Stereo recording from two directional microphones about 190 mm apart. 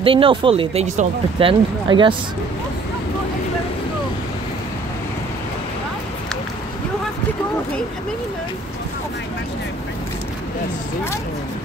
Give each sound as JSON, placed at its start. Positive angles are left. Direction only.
{"t": 0.0, "sound": "speech", "side_deg": -30}